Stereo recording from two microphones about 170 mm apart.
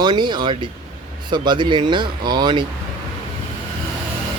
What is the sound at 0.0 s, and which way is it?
Speech, 25° right (ahead or behind).